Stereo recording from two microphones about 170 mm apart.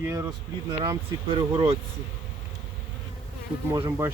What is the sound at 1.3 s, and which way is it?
Speech, 30° right (ahead or behind).